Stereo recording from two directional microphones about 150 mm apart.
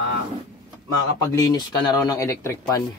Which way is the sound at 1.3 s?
25° left (ahead or behind).